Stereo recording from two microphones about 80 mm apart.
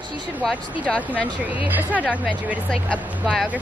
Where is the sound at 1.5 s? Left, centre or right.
Centre.